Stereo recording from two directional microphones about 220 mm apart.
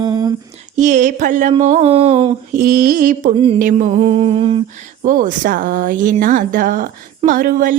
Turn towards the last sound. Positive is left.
turn(degrees=-40)  # may be behind; listen again after turning